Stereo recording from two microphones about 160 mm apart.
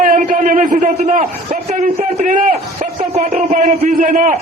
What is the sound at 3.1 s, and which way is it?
A man's voice, 40° right (ahead or behind).